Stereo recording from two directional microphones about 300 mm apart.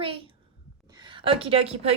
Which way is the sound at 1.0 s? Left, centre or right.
Centre.